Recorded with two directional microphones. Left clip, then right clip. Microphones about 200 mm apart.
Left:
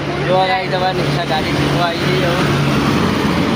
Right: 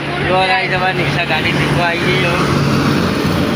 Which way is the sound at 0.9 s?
55° left (ahead or behind).